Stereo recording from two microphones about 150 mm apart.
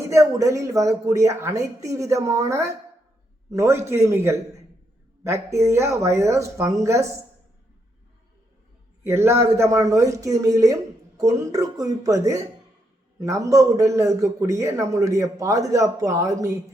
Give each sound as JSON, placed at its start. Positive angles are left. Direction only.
{"t": 0.1, "sound": "a man's voice", "side_deg": -20}
{"t": 9.0, "sound": "a man's voice", "side_deg": -15}